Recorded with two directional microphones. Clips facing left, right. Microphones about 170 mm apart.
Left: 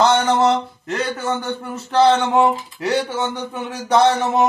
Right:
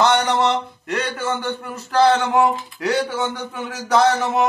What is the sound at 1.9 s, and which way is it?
Speech, 25° left (ahead or behind).